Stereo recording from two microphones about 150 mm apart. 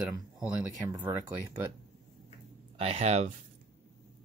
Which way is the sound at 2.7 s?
45° right (ahead or behind).